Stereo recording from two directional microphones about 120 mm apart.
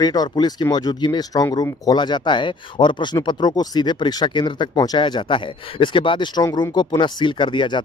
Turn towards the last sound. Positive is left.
turn(degrees=40)  # may be behind; listen again after turning